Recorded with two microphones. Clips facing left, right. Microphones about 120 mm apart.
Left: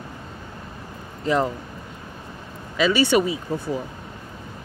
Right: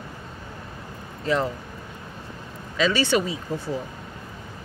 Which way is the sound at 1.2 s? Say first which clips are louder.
Left 2 dB; 15° left (ahead or behind).